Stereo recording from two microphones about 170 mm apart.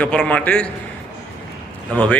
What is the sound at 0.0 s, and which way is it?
Speech, 10° left (ahead or behind).